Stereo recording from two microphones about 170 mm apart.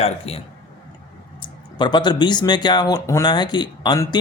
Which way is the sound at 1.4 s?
25° left (ahead or behind).